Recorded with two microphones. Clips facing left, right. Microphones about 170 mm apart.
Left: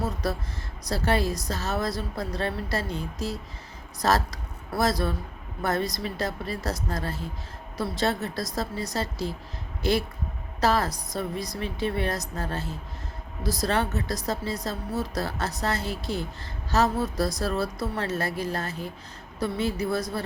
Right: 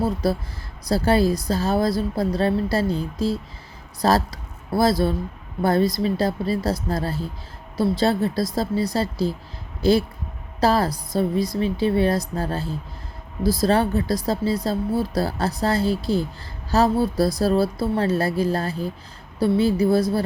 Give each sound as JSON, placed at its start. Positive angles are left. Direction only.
{"t": 0.0, "sound": "speech", "side_deg": -30}
{"t": 10.6, "sound": "speech", "side_deg": -30}